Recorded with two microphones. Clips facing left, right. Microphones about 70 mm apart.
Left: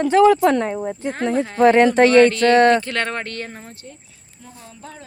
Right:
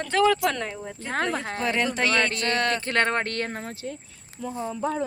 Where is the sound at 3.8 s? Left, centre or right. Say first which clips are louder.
Right 6 dB; right.